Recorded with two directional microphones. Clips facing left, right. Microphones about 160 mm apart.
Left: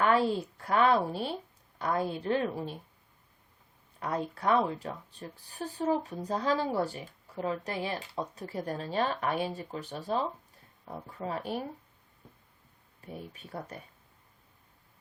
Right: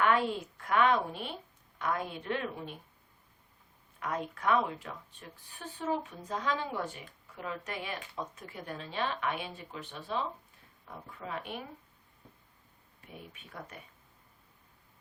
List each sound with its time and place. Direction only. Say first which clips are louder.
0.0 s a woman's voice: left 3 dB; 35° left (ahead or behind)
4.0 s speech: left 2 dB; 35° left (ahead or behind)
13.0 s speech: left 6 dB; 35° left (ahead or behind)